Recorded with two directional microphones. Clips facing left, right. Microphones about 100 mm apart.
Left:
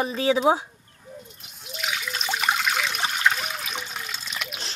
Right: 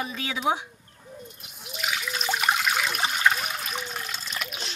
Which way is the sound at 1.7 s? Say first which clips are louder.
Even; 5° right (ahead or behind).